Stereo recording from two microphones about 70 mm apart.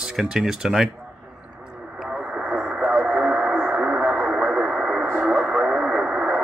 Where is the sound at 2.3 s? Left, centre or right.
Centre.